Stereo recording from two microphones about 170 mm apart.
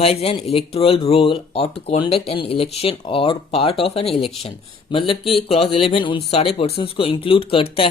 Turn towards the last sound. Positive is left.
turn(degrees=35)  # may be behind; listen again after turning